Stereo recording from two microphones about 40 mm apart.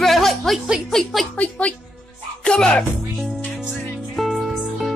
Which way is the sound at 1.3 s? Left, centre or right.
Left.